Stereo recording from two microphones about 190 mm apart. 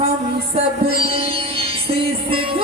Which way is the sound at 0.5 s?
30° right (ahead or behind).